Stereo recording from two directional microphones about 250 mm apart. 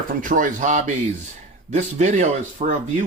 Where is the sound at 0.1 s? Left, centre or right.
Right.